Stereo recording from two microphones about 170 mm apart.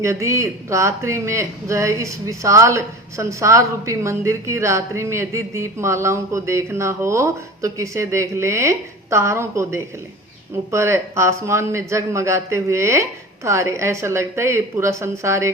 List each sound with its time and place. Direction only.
0.0 s speech: 15° right (ahead or behind)